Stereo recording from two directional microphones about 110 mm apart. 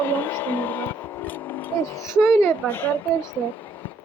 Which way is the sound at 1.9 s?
30° left (ahead or behind).